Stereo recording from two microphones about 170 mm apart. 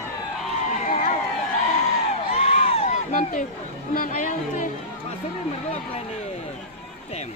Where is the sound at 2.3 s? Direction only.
35° left (ahead or behind).